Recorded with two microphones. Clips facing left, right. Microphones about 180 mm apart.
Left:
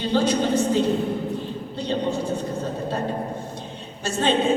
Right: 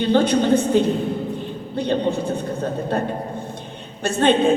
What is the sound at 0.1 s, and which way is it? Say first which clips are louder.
A woman's voice: right 4 dB; 60° right (ahead or behind).